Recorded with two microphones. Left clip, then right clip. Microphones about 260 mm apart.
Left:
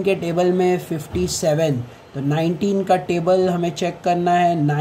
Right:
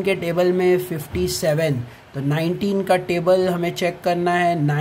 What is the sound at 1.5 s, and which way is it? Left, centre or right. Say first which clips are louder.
Speech: left 3 dB; centre.